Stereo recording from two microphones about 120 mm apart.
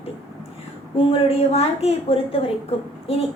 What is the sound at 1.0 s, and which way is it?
A woman's voice, 55° left (ahead or behind).